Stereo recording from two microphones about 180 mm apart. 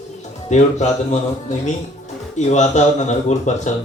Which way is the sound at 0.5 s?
40° left (ahead or behind).